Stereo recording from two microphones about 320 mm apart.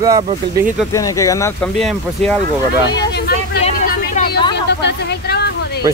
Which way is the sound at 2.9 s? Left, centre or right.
Left.